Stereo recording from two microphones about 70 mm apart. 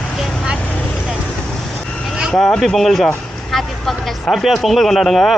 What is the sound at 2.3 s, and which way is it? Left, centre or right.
Speech, centre.